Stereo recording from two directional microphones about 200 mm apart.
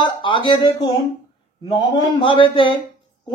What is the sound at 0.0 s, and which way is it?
Speech, 25° left (ahead or behind).